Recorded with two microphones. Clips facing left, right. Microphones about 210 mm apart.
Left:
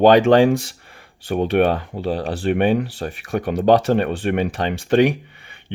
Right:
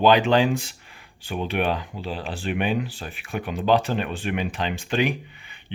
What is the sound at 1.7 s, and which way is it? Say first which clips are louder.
Speech: left 6 dB; 60° left (ahead or behind).